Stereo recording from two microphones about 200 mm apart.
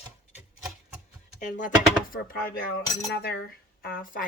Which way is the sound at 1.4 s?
40° left (ahead or behind).